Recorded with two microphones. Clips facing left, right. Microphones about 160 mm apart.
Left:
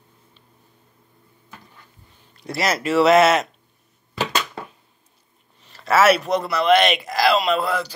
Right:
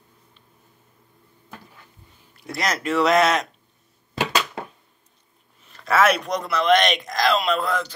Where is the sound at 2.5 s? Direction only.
5° left (ahead or behind).